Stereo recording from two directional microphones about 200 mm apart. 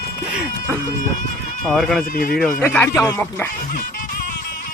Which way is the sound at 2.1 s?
45° left (ahead or behind).